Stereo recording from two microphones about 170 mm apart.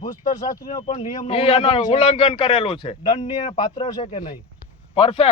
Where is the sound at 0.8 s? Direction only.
40° left (ahead or behind).